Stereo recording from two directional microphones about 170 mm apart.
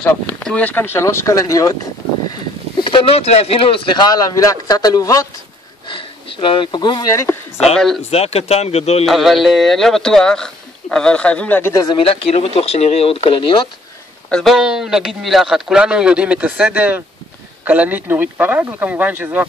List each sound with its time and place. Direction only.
0.0 s speech: 10° left (ahead or behind)
2.8 s speech: 30° left (ahead or behind)
5.9 s speech: 30° left (ahead or behind)
7.7 s speech: centre (ahead or behind)
8.0 s speech: 35° left (ahead or behind)
9.0 s speech: centre (ahead or behind); by 12.0 s 20° left (ahead or behind)
12.0 s speech: 35° left (ahead or behind)
14.3 s speech: centre (ahead or behind)